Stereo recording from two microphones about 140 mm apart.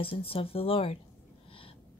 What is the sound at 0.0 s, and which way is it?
Speech, 40° left (ahead or behind).